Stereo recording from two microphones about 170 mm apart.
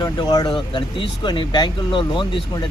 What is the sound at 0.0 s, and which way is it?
Speech, 20° left (ahead or behind).